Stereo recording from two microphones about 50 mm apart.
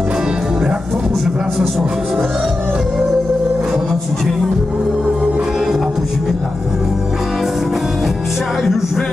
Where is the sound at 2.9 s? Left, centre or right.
Centre.